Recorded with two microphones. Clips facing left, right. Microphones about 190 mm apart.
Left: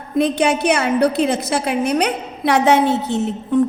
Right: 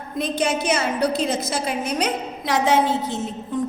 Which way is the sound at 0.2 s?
65° left (ahead or behind).